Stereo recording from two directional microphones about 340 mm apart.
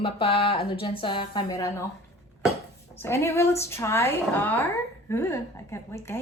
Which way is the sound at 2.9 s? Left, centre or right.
Centre.